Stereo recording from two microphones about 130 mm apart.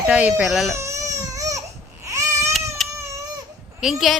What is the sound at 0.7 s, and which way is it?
Baby cry, 20° right (ahead or behind).